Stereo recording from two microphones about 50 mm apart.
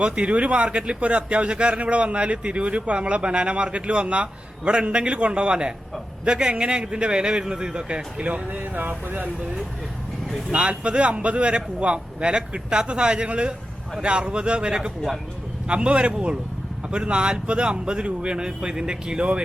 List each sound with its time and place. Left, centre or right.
0.0 s speech: right
10.5 s speech: right